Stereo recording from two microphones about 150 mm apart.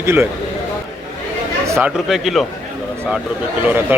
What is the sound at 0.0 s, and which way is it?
Speech, 15° right (ahead or behind).